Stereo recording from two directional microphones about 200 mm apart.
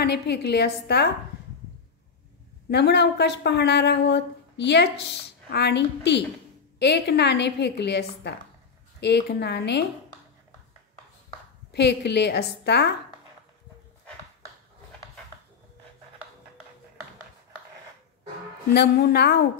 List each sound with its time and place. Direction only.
0.0 s speech: 55° left (ahead or behind)
2.7 s speech: 55° left (ahead or behind)
11.7 s speech: 60° left (ahead or behind)
18.7 s speech: 55° left (ahead or behind)